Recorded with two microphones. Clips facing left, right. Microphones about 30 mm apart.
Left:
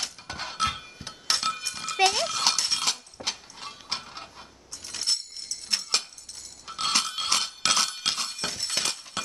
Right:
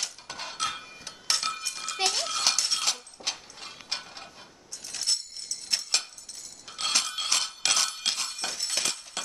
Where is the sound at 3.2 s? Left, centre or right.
Left.